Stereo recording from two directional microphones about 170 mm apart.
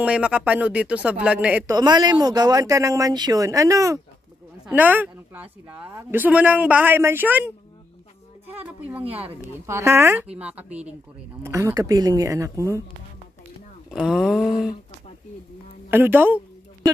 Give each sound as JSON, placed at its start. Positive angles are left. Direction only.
{"t": 0.0, "sound": "speech", "side_deg": -5}
{"t": 1.7, "sound": "speech", "side_deg": -25}
{"t": 8.5, "sound": "speech", "side_deg": -10}
{"t": 14.0, "sound": "a sound", "side_deg": 0}
{"t": 15.9, "sound": "speech", "side_deg": -10}